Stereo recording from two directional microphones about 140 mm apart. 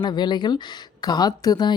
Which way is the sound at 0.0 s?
30° left (ahead or behind).